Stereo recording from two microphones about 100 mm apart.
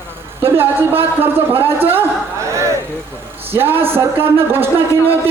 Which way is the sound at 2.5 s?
30° right (ahead or behind).